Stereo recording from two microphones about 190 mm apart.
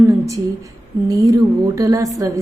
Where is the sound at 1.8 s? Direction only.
15° right (ahead or behind).